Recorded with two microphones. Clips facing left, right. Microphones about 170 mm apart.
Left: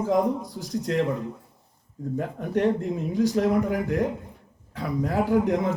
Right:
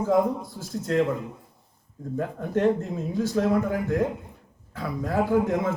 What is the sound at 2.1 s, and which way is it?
Speech, 15° left (ahead or behind).